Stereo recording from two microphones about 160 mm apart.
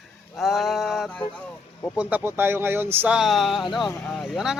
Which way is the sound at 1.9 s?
10° right (ahead or behind).